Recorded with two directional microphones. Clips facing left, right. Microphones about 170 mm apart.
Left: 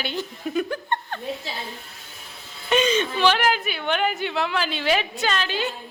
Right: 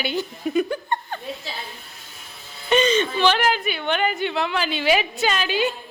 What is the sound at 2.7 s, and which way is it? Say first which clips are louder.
A woman's voice: right 2 dB; 10° left (ahead or behind).